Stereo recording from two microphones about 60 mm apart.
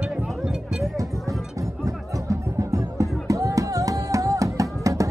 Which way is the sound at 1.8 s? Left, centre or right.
Right.